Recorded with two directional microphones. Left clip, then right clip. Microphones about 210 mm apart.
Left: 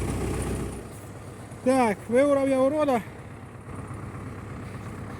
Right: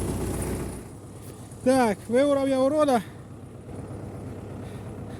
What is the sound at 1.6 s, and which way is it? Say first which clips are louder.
Speech: right 1 dB; 10° right (ahead or behind).